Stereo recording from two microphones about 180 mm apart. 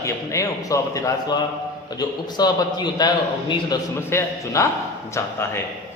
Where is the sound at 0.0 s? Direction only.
15° left (ahead or behind).